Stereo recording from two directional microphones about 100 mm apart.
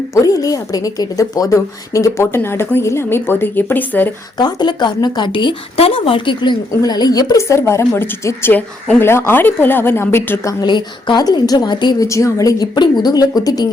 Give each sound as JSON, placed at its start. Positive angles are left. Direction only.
{"t": 0.1, "sound": "a woman's voice", "side_deg": 35}
{"t": 4.4, "sound": "a woman's voice", "side_deg": 45}
{"t": 7.4, "sound": "a woman's voice", "side_deg": 30}
{"t": 10.4, "sound": "a woman's voice", "side_deg": 45}
{"t": 12.1, "sound": "a woman's voice", "side_deg": 35}